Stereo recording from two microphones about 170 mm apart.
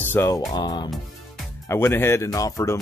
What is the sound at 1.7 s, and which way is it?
Speech, 15° left (ahead or behind).